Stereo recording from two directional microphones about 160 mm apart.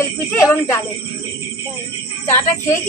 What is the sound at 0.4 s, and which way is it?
Speech, 15° left (ahead or behind).